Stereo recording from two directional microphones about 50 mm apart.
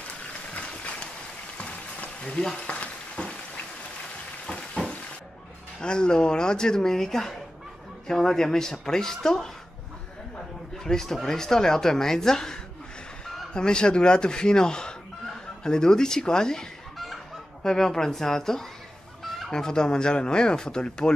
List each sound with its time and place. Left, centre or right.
0.6 s a sound: left
2.5 s frying: left
4.5 s frying: centre
5.8 s a woman's voice: centre
10.8 s a woman's voice: centre
17.6 s a woman's voice: centre